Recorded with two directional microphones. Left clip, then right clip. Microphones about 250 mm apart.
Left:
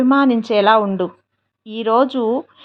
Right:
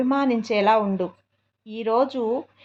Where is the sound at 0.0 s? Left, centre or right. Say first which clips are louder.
Left 7 dB; left.